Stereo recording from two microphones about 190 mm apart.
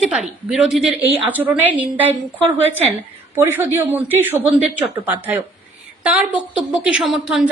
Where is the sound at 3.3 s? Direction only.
15° right (ahead or behind).